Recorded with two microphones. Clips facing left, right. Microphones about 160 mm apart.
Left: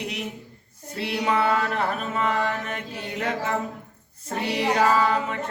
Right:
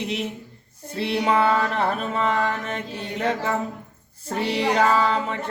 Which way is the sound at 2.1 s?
30° right (ahead or behind).